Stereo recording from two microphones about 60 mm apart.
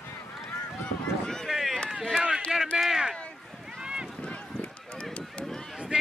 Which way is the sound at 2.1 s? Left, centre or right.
Centre.